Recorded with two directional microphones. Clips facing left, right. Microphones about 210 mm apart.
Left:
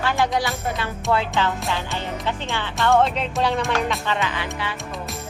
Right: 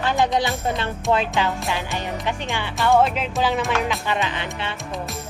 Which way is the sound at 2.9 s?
5° right (ahead or behind).